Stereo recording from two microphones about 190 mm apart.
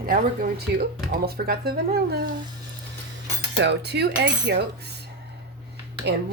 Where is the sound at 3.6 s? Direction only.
65° right (ahead or behind).